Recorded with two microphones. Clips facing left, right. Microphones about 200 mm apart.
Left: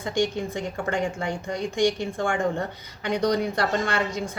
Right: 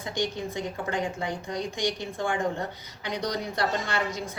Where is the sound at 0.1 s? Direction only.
50° left (ahead or behind).